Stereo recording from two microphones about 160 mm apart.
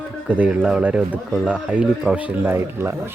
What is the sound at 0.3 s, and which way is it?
Speech, 10° right (ahead or behind).